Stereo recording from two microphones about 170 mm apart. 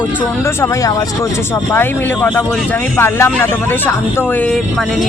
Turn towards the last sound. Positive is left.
turn(degrees=15)  # may be behind; listen again after turning